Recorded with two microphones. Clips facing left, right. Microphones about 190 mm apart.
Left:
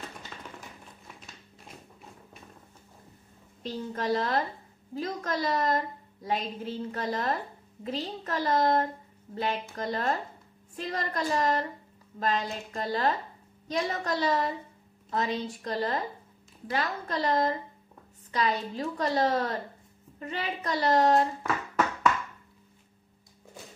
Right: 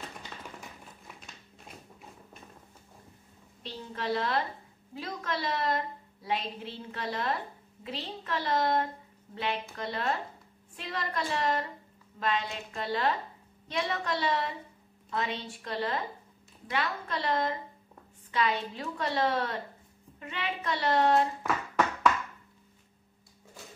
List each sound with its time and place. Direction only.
3.6 s a woman's voice: 40° left (ahead or behind)
21.4 s hands: centre (ahead or behind)